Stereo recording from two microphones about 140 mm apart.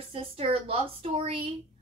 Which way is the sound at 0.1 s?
40° right (ahead or behind).